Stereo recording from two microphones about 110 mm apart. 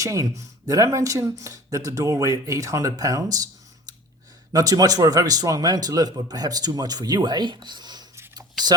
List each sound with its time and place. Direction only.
0.0 s speech: 30° right (ahead or behind)
4.5 s speech: 35° right (ahead or behind)